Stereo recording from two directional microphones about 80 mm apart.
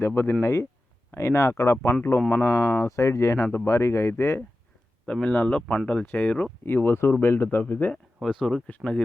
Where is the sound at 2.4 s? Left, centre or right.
Left.